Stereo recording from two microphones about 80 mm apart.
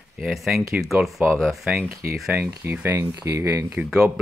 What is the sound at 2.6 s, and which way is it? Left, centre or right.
Speech, right.